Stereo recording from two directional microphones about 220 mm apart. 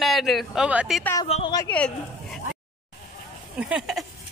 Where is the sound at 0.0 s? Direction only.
Centre (ahead or behind).